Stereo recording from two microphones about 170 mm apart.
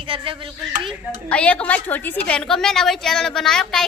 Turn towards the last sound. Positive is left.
turn(degrees=5)  # may be behind; listen again after turning